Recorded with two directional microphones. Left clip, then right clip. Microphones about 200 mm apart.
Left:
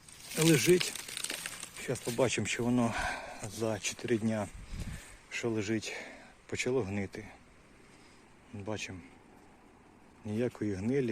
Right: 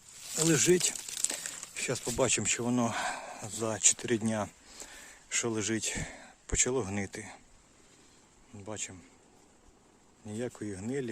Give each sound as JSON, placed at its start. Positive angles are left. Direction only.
{"t": 0.5, "sound": "crumpling", "side_deg": -20}
{"t": 1.8, "sound": "speech", "side_deg": -20}
{"t": 8.5, "sound": "speech", "side_deg": -5}
{"t": 10.2, "sound": "speech", "side_deg": -5}